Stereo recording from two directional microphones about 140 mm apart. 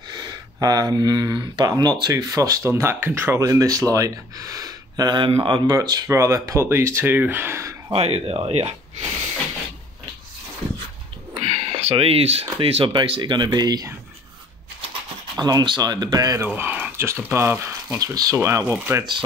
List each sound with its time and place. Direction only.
0.1 s speech: 30° right (ahead or behind)
5.8 s speech: 25° right (ahead or behind)
7.9 s speech: 45° right (ahead or behind)
11.3 s a sound: 45° right (ahead or behind)
12.5 s speech: 40° right (ahead or behind)
15.3 s speech: 30° right (ahead or behind)
16.4 s speech: 10° right (ahead or behind)